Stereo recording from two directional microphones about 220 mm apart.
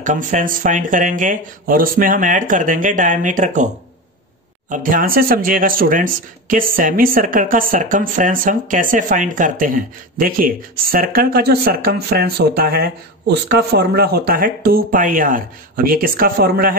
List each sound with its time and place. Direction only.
0.0 s speech: 35° right (ahead or behind)